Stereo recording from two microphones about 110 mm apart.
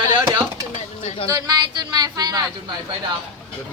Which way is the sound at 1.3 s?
30° right (ahead or behind).